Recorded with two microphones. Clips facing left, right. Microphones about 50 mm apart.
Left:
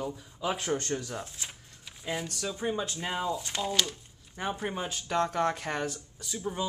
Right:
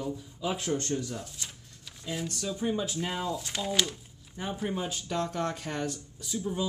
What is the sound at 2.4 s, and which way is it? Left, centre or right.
Speech, centre.